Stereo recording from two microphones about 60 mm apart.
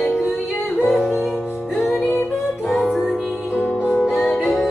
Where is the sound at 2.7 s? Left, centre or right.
Centre.